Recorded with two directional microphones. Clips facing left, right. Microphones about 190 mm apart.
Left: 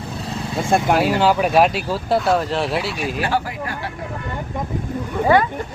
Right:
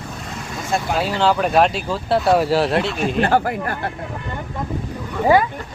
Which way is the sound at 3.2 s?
50° right (ahead or behind).